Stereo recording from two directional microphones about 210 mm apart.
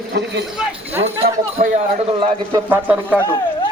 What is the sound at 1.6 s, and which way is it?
Speech, 45° right (ahead or behind).